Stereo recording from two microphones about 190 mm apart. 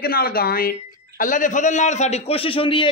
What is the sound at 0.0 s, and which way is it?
A man's voice, 55° left (ahead or behind).